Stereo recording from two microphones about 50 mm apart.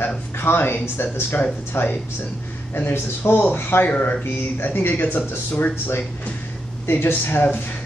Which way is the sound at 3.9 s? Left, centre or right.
Left.